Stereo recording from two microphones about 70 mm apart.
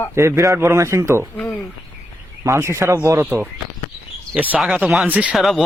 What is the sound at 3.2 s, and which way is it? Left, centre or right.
Speech, right.